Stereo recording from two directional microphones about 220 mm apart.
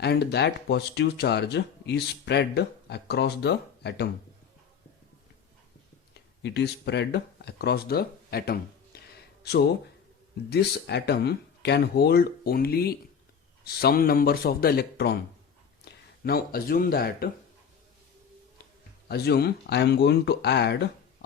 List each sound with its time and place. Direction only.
0.0 s speech: 50° left (ahead or behind)
6.4 s speech: 50° left (ahead or behind)
19.0 s speech: 45° left (ahead or behind)